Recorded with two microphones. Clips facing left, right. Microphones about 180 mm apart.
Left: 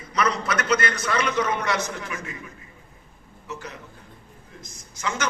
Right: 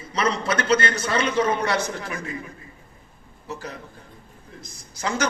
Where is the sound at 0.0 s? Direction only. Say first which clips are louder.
Right 1 dB; 30° right (ahead or behind).